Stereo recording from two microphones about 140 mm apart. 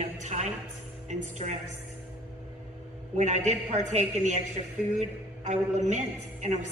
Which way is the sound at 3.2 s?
55° right (ahead or behind).